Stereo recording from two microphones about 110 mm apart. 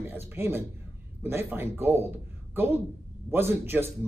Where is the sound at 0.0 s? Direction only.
20° right (ahead or behind).